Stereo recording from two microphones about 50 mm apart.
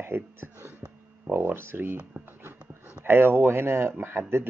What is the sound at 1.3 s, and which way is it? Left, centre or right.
Speech, right.